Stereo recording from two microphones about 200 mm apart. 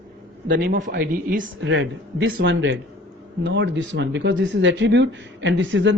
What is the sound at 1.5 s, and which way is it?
Speech, 70° right (ahead or behind).